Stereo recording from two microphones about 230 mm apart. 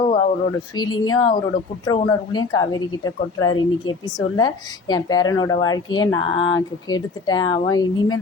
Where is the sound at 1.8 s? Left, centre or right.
Centre.